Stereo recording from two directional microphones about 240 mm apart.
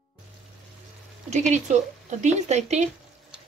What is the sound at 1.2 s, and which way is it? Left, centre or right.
Speech, right.